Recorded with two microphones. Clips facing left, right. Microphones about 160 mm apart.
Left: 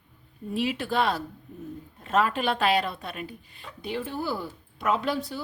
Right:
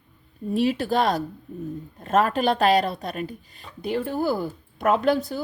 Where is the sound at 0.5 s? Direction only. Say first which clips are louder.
Right 5 dB; 40° right (ahead or behind).